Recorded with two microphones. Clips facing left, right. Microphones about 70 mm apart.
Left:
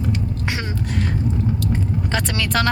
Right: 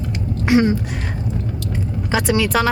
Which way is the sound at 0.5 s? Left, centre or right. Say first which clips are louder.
Right 13 dB; centre.